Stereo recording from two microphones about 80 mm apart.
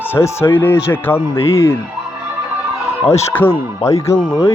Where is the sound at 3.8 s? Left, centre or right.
Left.